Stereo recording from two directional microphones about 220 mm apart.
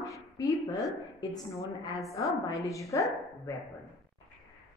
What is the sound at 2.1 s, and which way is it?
Speech, 15° left (ahead or behind).